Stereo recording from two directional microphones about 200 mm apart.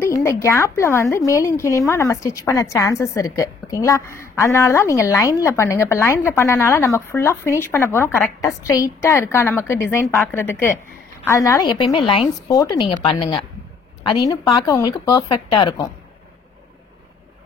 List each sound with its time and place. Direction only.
0.0 s a woman's voice: 15° left (ahead or behind)